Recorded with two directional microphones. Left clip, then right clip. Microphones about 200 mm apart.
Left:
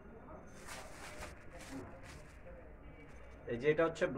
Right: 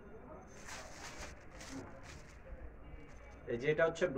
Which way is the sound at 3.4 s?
20° left (ahead or behind).